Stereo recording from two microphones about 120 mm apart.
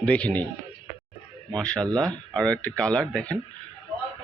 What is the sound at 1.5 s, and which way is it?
Speech, 5° left (ahead or behind).